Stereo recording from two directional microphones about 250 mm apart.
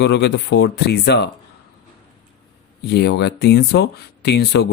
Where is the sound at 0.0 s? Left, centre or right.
Left.